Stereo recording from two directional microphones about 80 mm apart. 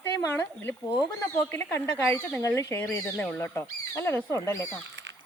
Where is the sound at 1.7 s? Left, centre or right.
Left.